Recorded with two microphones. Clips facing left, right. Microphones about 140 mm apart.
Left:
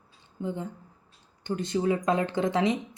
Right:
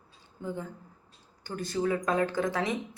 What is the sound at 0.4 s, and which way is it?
Speech, 20° left (ahead or behind).